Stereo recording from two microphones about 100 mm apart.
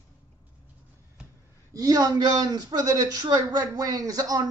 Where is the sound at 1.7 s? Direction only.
35° right (ahead or behind).